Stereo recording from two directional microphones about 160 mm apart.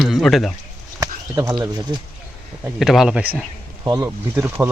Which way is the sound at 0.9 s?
20° right (ahead or behind).